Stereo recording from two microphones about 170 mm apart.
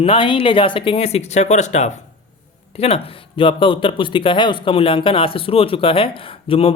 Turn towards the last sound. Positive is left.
turn(degrees=35)  # may be behind; listen again after turning